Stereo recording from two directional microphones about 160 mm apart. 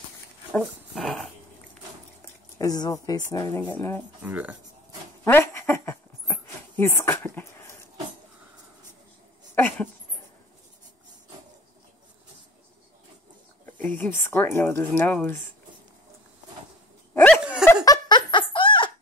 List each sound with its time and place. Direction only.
0.5 s dog: centre (ahead or behind)
2.2 s a sound: 25° left (ahead or behind)
3.3 s speech: 20° left (ahead or behind)
4.2 s speech: 10° right (ahead or behind)
5.2 s dog: 15° left (ahead or behind)
9.6 s a sound: 10° left (ahead or behind)
13.7 s a sound: 10° left (ahead or behind)
14.1 s speech: 15° left (ahead or behind)
17.1 s dog: 10° left (ahead or behind)
17.4 s dog: 5° right (ahead or behind)
17.8 s giggle: 25° left (ahead or behind)